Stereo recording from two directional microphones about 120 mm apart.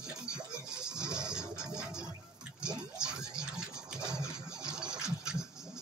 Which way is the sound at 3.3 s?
5° right (ahead or behind).